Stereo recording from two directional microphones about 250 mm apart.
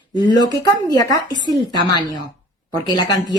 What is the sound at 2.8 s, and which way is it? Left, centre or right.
Speech, centre.